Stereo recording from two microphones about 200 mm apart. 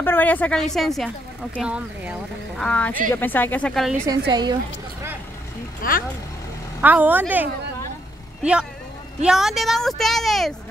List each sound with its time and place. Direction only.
0.0 s a woman's voice: 10° left (ahead or behind)
4.3 s a woman's voice: 20° right (ahead or behind)
5.8 s speech: 45° left (ahead or behind)
6.8 s a woman's voice: 10° right (ahead or behind)
9.2 s a woman's voice: centre (ahead or behind)